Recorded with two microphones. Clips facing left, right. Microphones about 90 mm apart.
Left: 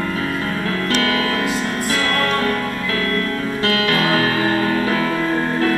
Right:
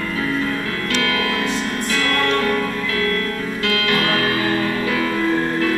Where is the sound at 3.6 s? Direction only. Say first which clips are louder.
Left 2 dB; 35° left (ahead or behind).